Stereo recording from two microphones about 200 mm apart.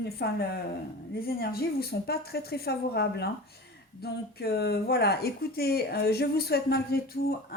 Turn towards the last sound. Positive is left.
turn(degrees=50)  # may be behind; listen again after turning